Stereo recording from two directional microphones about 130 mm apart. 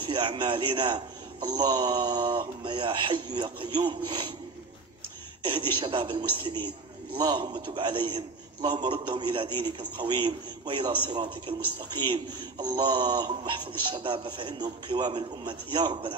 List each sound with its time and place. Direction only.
0.0 s a man's voice: 35° right (ahead or behind)
5.4 s a man's voice: 40° right (ahead or behind)